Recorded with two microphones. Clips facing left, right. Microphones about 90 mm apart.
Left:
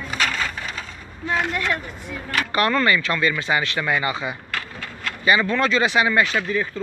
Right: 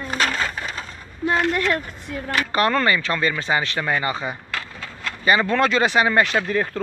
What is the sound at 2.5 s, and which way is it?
Speech, 35° right (ahead or behind).